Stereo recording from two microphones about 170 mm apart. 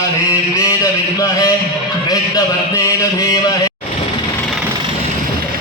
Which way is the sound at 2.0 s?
20° left (ahead or behind).